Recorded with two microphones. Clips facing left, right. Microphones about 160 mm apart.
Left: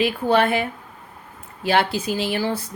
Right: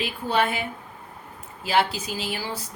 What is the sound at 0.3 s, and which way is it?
Speech, 60° left (ahead or behind).